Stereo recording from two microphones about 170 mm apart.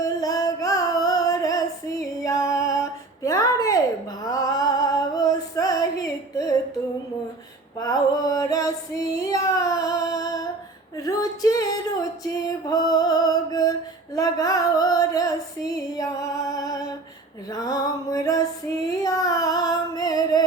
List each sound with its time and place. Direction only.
0.0 s music: 20° left (ahead or behind)
2.2 s a sound: 20° left (ahead or behind)
4.2 s female singing: 20° left (ahead or behind)
7.8 s female singing: 20° left (ahead or behind)
10.9 s a sound: 20° left (ahead or behind)
14.2 s singing: 20° left (ahead or behind)
16.0 s music: 20° left (ahead or behind)